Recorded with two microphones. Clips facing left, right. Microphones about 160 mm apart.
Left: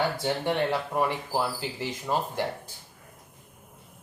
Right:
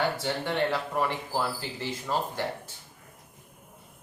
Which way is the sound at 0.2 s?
20° left (ahead or behind).